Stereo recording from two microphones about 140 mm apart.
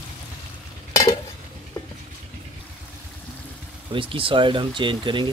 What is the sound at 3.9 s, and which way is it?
Speech, 40° right (ahead or behind).